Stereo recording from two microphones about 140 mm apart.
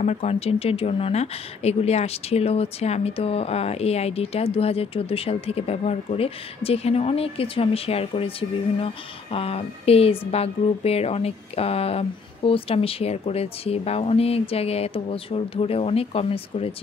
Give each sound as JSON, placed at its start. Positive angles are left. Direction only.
{"t": 0.0, "sound": "speech", "side_deg": 50}